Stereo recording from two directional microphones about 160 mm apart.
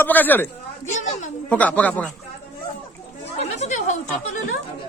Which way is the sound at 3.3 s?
45° left (ahead or behind).